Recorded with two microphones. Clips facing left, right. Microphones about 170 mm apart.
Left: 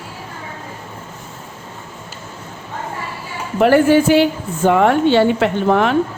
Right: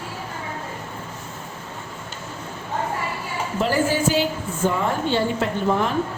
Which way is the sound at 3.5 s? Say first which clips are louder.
Left 10 dB; 65° left (ahead or behind).